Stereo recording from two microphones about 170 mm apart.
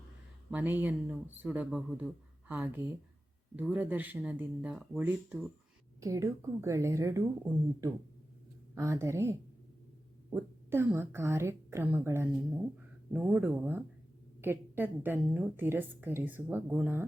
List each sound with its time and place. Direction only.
0.5 s a woman's voice: 10° right (ahead or behind)